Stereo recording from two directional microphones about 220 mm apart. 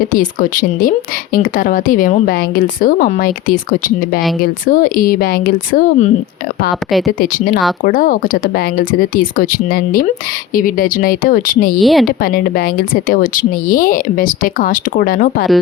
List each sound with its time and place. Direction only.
0.1 s a woman's voice: 35° left (ahead or behind)
7.2 s a woman's voice: 40° left (ahead or behind)
11.8 s speech: centre (ahead or behind)
12.2 s a woman's voice: 40° left (ahead or behind)